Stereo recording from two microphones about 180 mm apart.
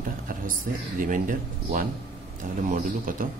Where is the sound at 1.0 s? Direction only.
50° right (ahead or behind).